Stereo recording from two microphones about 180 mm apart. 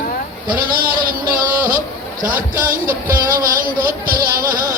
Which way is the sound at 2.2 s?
50° right (ahead or behind).